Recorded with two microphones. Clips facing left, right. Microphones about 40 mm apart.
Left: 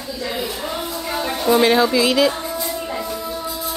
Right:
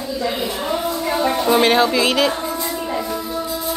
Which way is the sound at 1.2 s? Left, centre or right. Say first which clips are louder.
Right 1 dB; centre.